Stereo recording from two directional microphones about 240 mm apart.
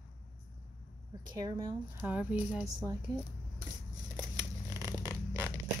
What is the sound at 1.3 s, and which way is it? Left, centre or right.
Speech, centre.